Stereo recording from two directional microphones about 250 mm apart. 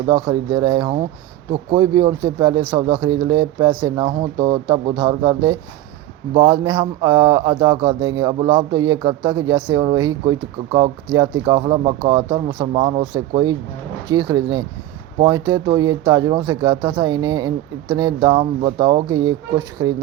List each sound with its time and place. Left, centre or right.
0.1 s speech: centre